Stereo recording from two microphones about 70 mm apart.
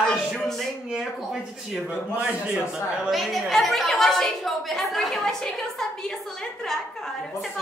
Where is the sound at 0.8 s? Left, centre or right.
Centre.